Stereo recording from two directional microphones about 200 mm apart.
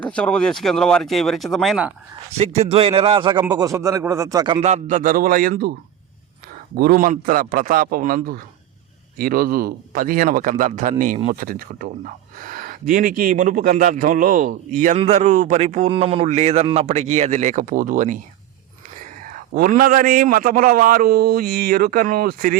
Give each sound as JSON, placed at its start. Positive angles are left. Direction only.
{"t": 0.0, "sound": "speech", "side_deg": 5}
{"t": 2.4, "sound": "a man's voice", "side_deg": -35}
{"t": 4.6, "sound": "a man's voice", "side_deg": -35}
{"t": 6.7, "sound": "a man's voice", "side_deg": -45}
{"t": 19.3, "sound": "a man's voice", "side_deg": -45}